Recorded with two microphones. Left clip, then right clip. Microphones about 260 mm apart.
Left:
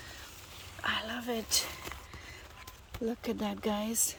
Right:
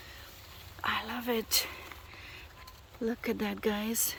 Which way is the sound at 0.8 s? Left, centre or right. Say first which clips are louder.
Right 1 dB; centre.